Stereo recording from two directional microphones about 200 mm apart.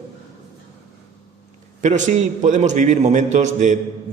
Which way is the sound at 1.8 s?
35° right (ahead or behind).